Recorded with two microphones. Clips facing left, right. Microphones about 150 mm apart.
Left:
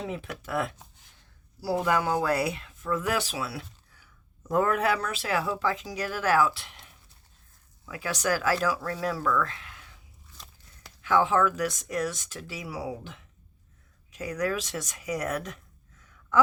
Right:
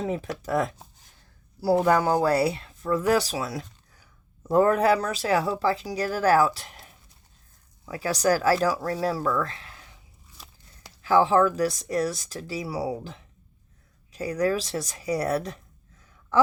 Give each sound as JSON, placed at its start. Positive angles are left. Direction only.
{"t": 0.0, "sound": "speech", "side_deg": -40}
{"t": 1.8, "sound": "speech", "side_deg": -40}
{"t": 10.4, "sound": "biting", "side_deg": -5}
{"t": 10.8, "sound": "speech", "side_deg": -35}